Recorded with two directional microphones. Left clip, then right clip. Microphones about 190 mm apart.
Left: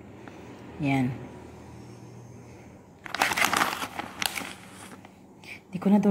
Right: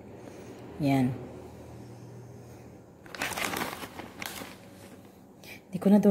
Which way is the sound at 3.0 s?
30° left (ahead or behind).